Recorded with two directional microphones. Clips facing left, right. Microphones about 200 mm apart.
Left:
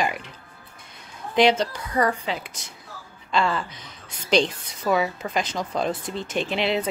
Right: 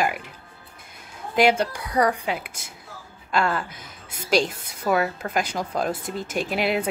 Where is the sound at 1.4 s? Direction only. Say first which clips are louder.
Even; 10° right (ahead or behind).